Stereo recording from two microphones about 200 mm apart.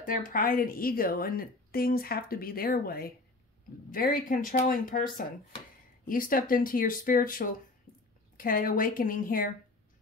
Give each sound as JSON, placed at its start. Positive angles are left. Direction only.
{"t": 0.0, "sound": "a woman's voice", "side_deg": 45}